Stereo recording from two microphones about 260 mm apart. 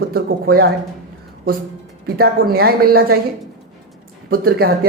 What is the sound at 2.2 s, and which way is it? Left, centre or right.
A man's voice, right.